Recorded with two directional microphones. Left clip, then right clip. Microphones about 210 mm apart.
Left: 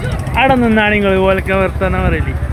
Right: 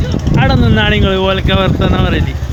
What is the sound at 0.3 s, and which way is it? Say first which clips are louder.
Speech: left 3 dB; 5° right (ahead or behind).